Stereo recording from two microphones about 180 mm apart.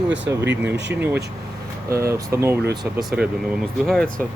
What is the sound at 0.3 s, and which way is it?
Speech, 15° right (ahead or behind).